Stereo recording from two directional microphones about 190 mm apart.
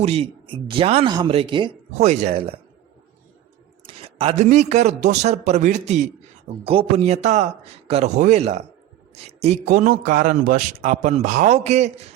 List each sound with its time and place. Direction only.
0.0 s a man's voice: 30° right (ahead or behind)
1.9 s a man's voice: 35° right (ahead or behind)
3.8 s a man's voice: 30° right (ahead or behind)